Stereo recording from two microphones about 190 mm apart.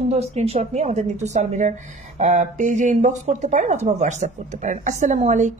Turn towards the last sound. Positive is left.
turn(degrees=-40)  # may be behind; listen again after turning